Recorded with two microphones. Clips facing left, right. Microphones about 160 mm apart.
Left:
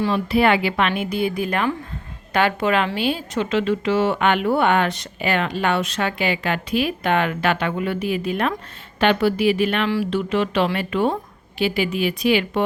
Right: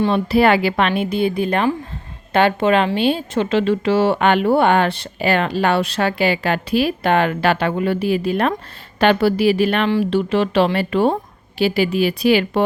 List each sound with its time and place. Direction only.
0.0 s a woman's voice: 35° right (ahead or behind)